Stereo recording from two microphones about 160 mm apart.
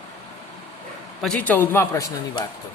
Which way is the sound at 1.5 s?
15° left (ahead or behind).